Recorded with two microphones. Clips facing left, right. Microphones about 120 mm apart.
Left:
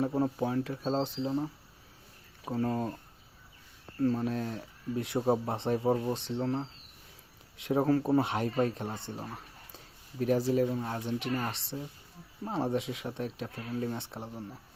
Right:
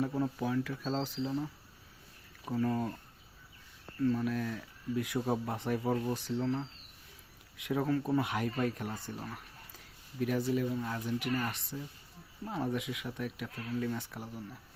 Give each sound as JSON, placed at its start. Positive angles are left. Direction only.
{"t": 0.0, "sound": "speech", "side_deg": 30}
{"t": 2.6, "sound": "speech", "side_deg": 35}
{"t": 3.9, "sound": "speech", "side_deg": 35}
{"t": 6.4, "sound": "speech", "side_deg": 35}